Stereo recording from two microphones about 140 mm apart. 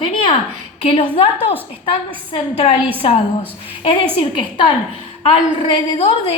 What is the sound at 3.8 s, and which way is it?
Speech, 40° left (ahead or behind).